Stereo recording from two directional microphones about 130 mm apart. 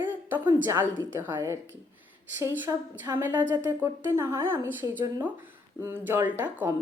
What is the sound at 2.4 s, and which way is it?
Speech, 15° right (ahead or behind).